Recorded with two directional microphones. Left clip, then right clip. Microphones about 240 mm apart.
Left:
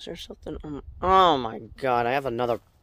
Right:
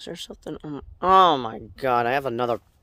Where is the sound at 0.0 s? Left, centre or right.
Centre.